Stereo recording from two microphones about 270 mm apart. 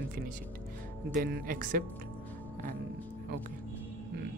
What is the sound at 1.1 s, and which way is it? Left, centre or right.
Speech, right.